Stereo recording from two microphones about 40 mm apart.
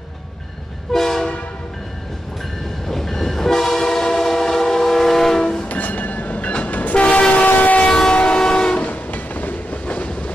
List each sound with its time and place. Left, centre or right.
0.9 s train: centre
2.9 s train: centre
5.7 s train: left
7.4 s train: left
7.8 s train: left
8.8 s train: left
9.8 s train: left